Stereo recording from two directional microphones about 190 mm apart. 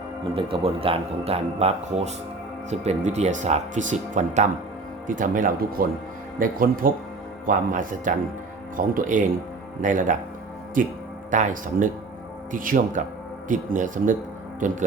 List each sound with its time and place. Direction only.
0.3 s a man's voice: 30° right (ahead or behind)